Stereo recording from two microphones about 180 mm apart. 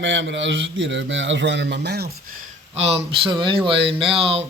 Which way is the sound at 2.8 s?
35° right (ahead or behind).